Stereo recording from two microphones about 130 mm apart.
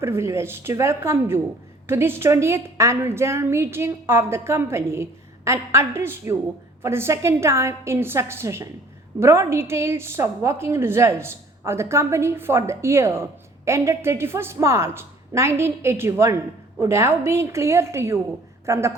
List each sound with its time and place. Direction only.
0.0 s a woman's voice: 20° right (ahead or behind)